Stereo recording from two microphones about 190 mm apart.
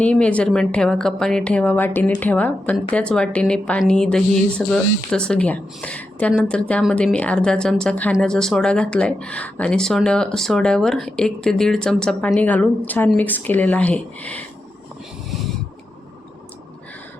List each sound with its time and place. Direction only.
0.0 s a woman's voice: 5° left (ahead or behind)